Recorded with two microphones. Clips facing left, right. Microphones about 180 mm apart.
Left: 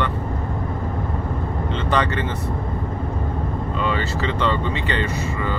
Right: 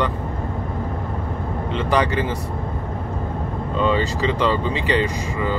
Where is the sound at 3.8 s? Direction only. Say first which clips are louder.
Right 5 dB; 20° right (ahead or behind).